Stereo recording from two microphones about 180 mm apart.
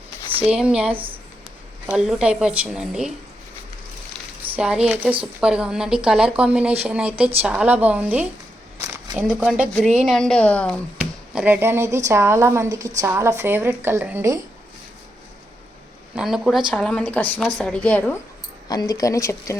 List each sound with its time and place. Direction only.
0.5 s speech: 5° right (ahead or behind)
0.9 s speech: 30° right (ahead or behind)
1.9 s speech: 5° right (ahead or behind)
4.5 s a woman's voice: 5° right (ahead or behind)
11.3 s a woman's voice: 10° right (ahead or behind)
16.1 s speech: 5° right (ahead or behind)
18.7 s speech: 20° left (ahead or behind)